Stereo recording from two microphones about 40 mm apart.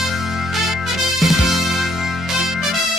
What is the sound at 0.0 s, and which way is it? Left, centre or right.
Music, centre.